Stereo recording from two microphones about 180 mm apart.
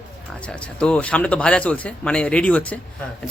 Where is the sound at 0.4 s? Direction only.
5° left (ahead or behind).